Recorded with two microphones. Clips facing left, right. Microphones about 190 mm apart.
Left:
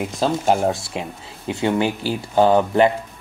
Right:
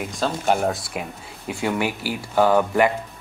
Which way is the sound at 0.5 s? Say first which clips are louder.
Left 3 dB; 30° left (ahead or behind).